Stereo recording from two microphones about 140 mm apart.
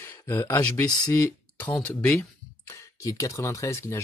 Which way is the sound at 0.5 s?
25° left (ahead or behind).